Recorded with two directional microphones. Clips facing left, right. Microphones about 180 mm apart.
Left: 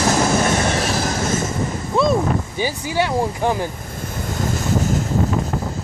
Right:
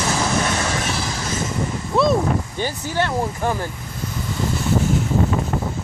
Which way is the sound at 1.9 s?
Centre (ahead or behind).